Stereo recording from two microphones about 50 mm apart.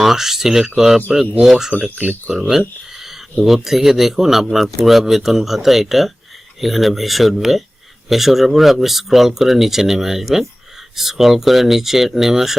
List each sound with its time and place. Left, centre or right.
0.0 s speech: centre
2.0 s speech: right
2.5 s speech: centre